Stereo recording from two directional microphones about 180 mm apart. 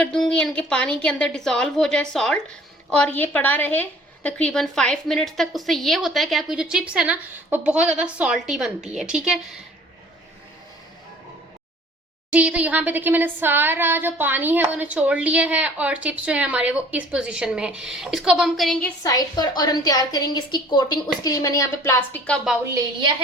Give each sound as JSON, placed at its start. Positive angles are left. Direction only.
{"t": 0.0, "sound": "a woman's voice", "side_deg": 5}
{"t": 12.3, "sound": "a sound", "side_deg": -5}
{"t": 19.0, "sound": "a woman's voice", "side_deg": 20}
{"t": 22.7, "sound": "a woman's voice", "side_deg": -25}